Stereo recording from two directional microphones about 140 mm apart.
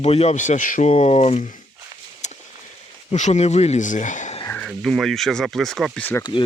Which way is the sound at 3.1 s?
55° left (ahead or behind).